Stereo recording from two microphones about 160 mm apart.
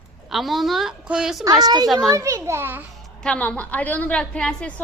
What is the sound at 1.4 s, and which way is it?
A woman's voice, 25° right (ahead or behind).